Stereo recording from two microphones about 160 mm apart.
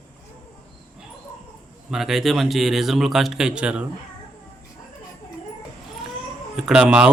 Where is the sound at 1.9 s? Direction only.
Centre (ahead or behind).